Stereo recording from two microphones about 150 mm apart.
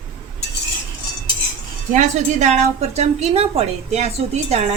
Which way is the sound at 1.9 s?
55° right (ahead or behind).